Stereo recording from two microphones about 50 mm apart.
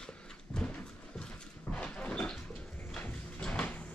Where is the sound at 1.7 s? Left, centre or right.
Left.